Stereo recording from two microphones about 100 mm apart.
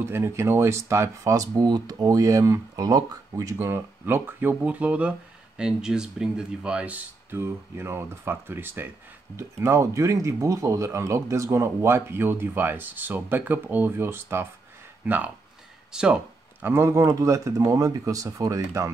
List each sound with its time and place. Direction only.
0.1 s speech: 25° right (ahead or behind)
3.5 s speech: 20° right (ahead or behind)
16.6 s speech: 25° right (ahead or behind)